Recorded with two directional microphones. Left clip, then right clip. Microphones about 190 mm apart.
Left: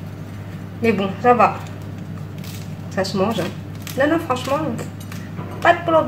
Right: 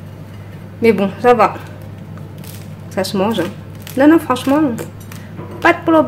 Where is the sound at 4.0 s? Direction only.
45° right (ahead or behind).